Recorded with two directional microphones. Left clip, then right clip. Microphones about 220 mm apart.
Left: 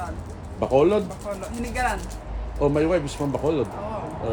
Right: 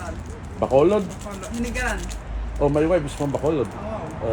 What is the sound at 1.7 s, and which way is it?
Speech, 20° left (ahead or behind).